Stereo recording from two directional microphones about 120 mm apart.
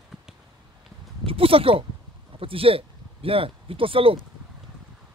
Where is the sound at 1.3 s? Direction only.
50° right (ahead or behind).